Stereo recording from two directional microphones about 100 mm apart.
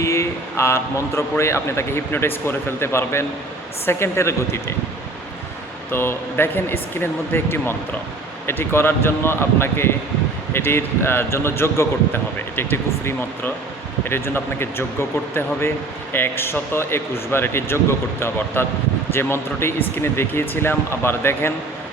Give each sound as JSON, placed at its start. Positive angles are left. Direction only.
{"t": 0.0, "sound": "a man's voice", "side_deg": 30}
{"t": 5.9, "sound": "a man's voice", "side_deg": 20}